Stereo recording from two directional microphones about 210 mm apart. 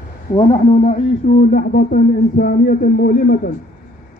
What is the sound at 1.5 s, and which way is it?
A man's voice, 45° left (ahead or behind).